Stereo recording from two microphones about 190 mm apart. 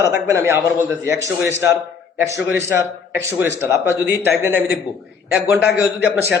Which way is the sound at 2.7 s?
10° right (ahead or behind).